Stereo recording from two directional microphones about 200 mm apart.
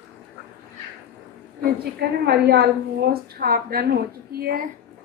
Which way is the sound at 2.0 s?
55° right (ahead or behind).